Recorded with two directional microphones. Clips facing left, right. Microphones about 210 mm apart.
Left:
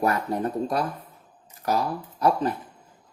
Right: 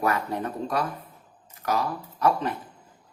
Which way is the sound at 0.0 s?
35° left (ahead or behind).